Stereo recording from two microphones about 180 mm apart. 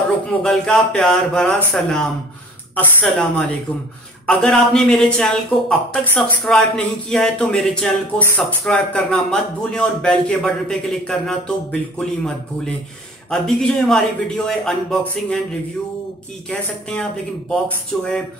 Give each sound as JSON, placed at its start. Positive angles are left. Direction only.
{"t": 0.4, "sound": "a woman's voice", "side_deg": 5}
{"t": 16.4, "sound": "speech", "side_deg": 5}